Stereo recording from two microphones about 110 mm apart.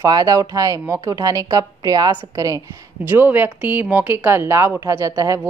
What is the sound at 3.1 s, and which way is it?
A woman's voice, 20° right (ahead or behind).